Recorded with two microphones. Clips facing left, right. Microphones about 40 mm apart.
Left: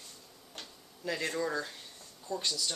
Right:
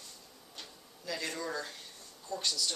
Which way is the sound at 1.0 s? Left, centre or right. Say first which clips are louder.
Left 3 dB; left.